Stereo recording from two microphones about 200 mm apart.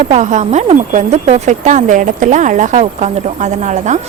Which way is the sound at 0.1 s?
35° right (ahead or behind).